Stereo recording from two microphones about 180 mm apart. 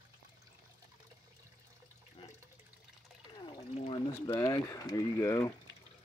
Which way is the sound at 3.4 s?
25° left (ahead or behind).